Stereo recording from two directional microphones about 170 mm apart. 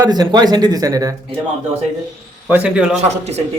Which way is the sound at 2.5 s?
10° right (ahead or behind).